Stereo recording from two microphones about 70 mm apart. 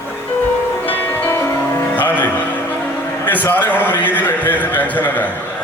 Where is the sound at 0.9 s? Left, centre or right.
Left.